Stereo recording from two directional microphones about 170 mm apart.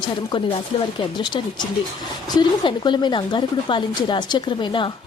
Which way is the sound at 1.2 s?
25° left (ahead or behind).